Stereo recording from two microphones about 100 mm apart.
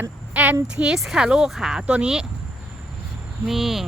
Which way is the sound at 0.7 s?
5° right (ahead or behind).